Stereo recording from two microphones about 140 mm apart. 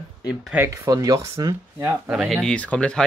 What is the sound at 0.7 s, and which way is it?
Speech, 25° right (ahead or behind).